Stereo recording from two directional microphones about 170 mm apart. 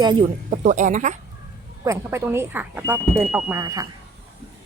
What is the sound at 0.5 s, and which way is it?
Speech, 45° right (ahead or behind).